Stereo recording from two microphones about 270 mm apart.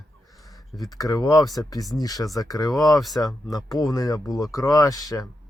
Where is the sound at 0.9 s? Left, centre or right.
Centre.